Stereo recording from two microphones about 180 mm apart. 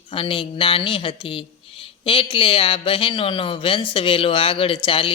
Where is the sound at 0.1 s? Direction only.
30° left (ahead or behind).